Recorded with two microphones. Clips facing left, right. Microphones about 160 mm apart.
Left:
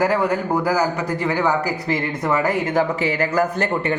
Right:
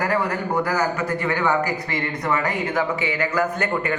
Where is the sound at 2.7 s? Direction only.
40° left (ahead or behind).